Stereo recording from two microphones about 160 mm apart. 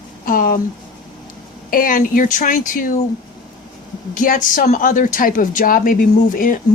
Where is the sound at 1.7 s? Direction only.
60° left (ahead or behind).